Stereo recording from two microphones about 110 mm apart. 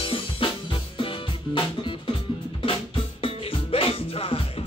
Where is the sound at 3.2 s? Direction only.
60° left (ahead or behind).